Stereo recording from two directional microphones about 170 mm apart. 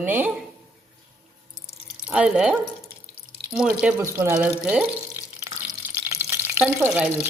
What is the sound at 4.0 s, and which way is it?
Speech, 20° right (ahead or behind).